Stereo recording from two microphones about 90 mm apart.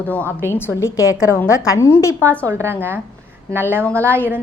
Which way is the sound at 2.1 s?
20° left (ahead or behind).